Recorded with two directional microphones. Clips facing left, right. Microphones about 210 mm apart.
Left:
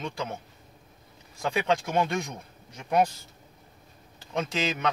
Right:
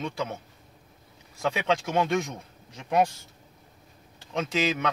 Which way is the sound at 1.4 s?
Centre (ahead or behind).